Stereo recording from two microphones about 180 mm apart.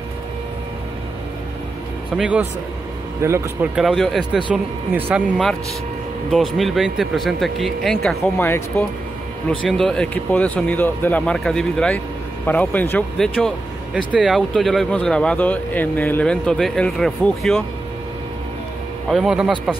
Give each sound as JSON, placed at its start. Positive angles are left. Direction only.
{"t": 2.1, "sound": "a man's voice", "side_deg": -5}
{"t": 3.7, "sound": "speech", "side_deg": 0}
{"t": 8.7, "sound": "speech", "side_deg": 10}
{"t": 19.0, "sound": "speech", "side_deg": 0}